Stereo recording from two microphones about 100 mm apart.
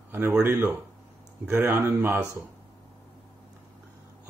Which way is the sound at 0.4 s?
20° right (ahead or behind).